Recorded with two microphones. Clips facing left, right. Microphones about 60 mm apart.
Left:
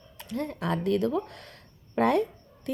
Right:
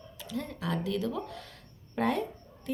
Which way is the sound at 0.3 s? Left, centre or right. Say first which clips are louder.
Left 4 dB; left.